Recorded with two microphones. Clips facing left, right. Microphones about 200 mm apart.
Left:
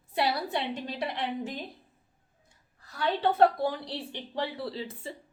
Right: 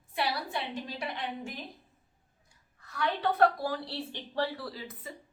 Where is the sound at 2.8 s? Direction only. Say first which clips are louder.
Left 3 dB; 30° left (ahead or behind).